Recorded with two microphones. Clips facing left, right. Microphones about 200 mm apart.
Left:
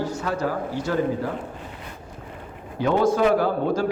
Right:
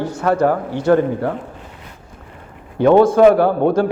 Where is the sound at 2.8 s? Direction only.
55° right (ahead or behind).